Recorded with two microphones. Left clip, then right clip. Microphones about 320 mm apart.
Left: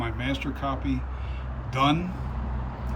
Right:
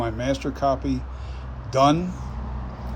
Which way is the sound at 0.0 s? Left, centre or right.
Centre.